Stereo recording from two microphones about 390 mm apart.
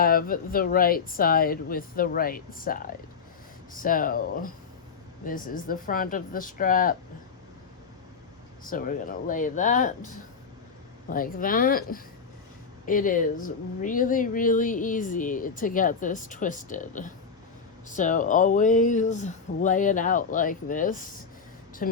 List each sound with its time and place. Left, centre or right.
0.0 s speech: left
8.6 s speech: left
11.1 s speech: left